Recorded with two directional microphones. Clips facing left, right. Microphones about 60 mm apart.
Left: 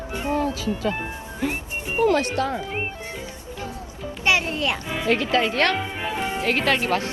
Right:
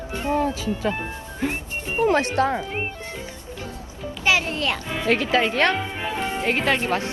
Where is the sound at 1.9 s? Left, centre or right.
Right.